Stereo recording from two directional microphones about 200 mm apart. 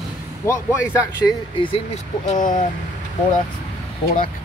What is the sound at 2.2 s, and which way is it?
Speech, 40° left (ahead or behind).